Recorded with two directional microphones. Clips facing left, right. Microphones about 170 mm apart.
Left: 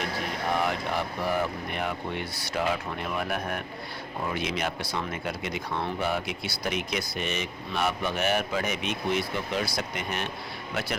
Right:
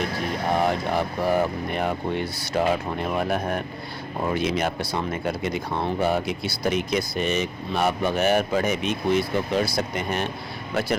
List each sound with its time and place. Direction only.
0.5 s speech: 35° right (ahead or behind)